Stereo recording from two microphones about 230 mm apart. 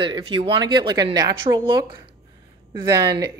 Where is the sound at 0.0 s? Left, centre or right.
Right.